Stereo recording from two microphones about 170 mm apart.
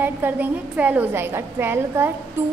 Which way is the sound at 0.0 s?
10° right (ahead or behind).